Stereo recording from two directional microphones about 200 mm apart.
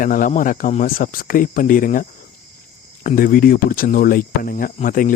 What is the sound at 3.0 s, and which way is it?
Speech, 45° left (ahead or behind).